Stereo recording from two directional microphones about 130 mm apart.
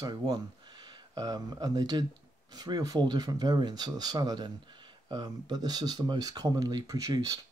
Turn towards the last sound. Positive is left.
turn(degrees=-25)  # may be behind; listen again after turning